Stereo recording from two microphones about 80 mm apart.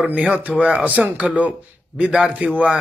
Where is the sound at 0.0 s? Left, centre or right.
Centre.